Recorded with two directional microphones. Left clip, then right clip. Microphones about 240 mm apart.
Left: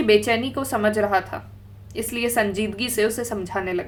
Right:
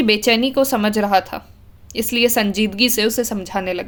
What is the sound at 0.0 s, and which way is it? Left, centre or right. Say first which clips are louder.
A woman's voice: right 3 dB; right.